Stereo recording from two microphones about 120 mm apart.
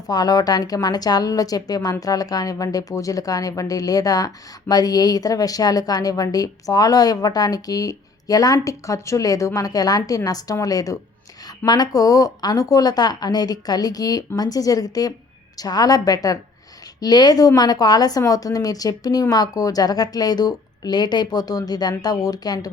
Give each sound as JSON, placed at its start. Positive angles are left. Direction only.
{"t": 0.1, "sound": "a woman's voice", "side_deg": 30}